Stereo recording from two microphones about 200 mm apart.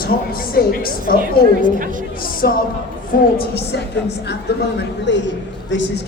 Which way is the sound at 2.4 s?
50° left (ahead or behind).